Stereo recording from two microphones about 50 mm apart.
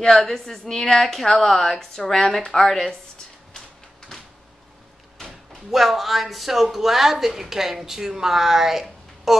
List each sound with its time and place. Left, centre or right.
0.0 s a woman's voice: centre
4.1 s a sound: centre
5.7 s speech: centre